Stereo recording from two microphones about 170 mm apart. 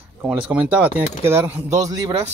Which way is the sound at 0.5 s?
10° right (ahead or behind).